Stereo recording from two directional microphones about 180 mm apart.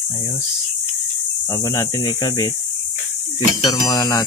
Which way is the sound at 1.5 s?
20° left (ahead or behind).